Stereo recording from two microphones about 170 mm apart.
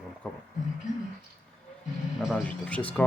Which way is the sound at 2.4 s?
10° left (ahead or behind).